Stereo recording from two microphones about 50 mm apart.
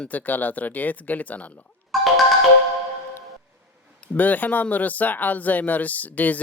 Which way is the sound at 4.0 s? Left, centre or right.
Left.